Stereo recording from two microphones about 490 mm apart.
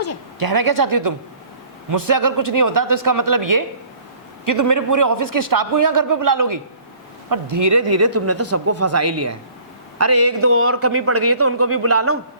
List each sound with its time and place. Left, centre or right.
0.3 s a woman's voice: right